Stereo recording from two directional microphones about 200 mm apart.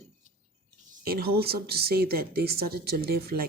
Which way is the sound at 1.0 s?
50° right (ahead or behind).